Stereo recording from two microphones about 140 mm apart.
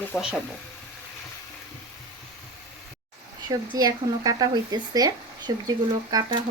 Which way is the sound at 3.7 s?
25° right (ahead or behind).